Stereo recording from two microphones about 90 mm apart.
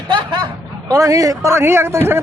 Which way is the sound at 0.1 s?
65° right (ahead or behind).